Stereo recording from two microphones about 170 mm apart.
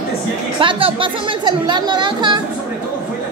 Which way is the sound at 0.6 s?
30° right (ahead or behind).